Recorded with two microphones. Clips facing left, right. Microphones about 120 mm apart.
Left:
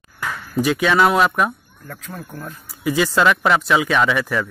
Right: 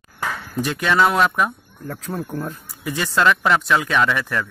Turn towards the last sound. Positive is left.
turn(degrees=5)  # may be behind; listen again after turning